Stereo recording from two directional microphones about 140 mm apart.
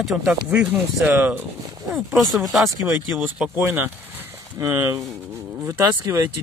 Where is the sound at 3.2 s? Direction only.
15° right (ahead or behind).